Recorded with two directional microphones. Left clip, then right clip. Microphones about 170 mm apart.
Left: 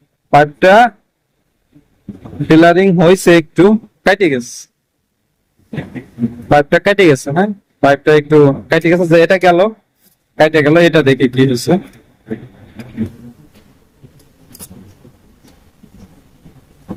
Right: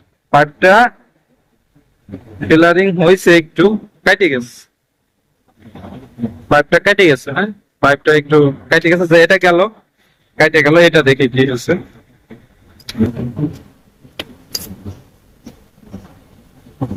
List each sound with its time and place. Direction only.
0.3 s speech: 50° left (ahead or behind)
2.5 s speech: 60° left (ahead or behind)
6.5 s speech: 50° left (ahead or behind)